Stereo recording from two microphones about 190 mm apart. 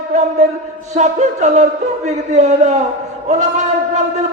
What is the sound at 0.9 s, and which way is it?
A man's voice, 40° right (ahead or behind).